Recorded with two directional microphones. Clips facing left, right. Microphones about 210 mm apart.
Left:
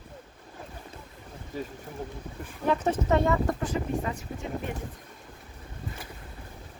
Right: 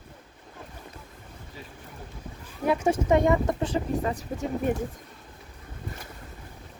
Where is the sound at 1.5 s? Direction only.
45° left (ahead or behind).